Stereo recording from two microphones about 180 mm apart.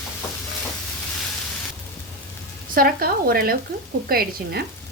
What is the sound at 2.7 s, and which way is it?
Speech, 55° right (ahead or behind).